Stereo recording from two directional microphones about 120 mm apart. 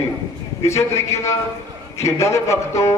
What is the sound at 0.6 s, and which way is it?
A man's voice, 25° left (ahead or behind).